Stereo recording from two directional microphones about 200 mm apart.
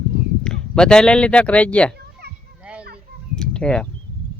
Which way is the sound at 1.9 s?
55° right (ahead or behind).